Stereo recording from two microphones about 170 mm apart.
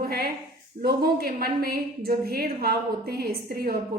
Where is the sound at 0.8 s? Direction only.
65° right (ahead or behind).